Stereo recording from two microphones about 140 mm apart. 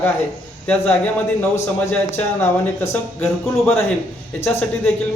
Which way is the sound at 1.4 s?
15° left (ahead or behind).